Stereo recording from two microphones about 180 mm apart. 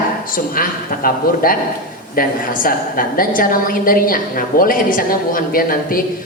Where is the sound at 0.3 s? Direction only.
50° left (ahead or behind).